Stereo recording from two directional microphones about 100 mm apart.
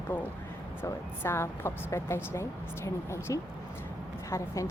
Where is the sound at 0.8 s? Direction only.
25° left (ahead or behind).